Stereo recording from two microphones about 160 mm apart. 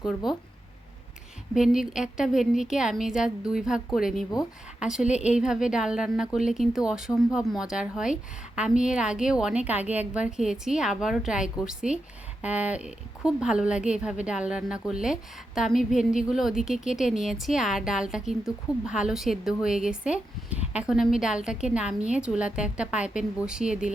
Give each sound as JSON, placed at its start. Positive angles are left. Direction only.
{"t": 1.5, "sound": "a woman's voice", "side_deg": 0}